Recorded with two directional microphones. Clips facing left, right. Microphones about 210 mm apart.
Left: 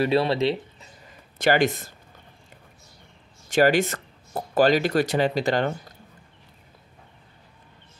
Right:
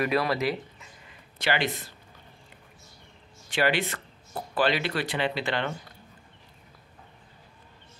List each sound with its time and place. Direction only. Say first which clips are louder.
0.0 s speech: left 5 dB; 30° left (ahead or behind)
1.0 s a sound: left 7 dB; 45° left (ahead or behind)
3.4 s speech: left 7 dB; 45° left (ahead or behind)